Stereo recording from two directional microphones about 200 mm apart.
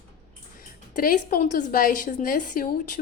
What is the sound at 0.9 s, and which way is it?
A woman's voice, 45° left (ahead or behind).